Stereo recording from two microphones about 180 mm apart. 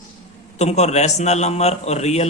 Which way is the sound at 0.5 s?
40° left (ahead or behind).